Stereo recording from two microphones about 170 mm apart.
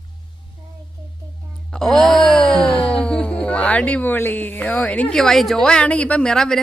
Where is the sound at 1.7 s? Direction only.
Centre (ahead or behind).